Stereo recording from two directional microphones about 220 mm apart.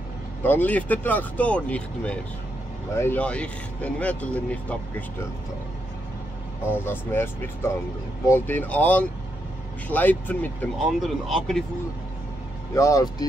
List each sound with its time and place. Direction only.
0.4 s speech: 10° left (ahead or behind)
6.6 s speech: 10° left (ahead or behind)
12.7 s speech: 15° left (ahead or behind)